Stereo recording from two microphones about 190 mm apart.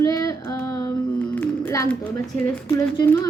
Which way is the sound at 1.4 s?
10° left (ahead or behind).